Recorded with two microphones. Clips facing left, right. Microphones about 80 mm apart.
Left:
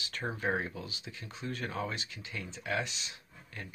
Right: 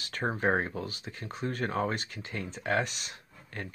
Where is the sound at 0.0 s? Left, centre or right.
Right.